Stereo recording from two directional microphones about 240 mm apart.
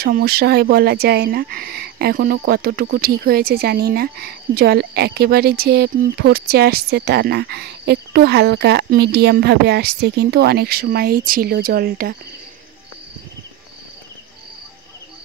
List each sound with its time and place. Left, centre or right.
0.0 s speech: right